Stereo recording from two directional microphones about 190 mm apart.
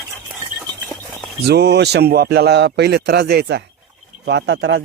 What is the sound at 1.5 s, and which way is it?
Speech, 60° right (ahead or behind).